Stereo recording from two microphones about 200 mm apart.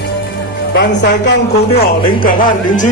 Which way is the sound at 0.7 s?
60° left (ahead or behind).